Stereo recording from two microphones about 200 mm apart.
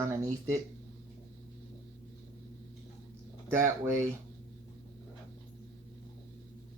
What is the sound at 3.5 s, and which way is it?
Speech, 15° right (ahead or behind).